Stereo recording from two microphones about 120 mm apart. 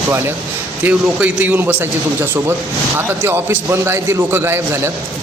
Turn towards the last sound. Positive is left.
turn(degrees=-20)  # may be behind; listen again after turning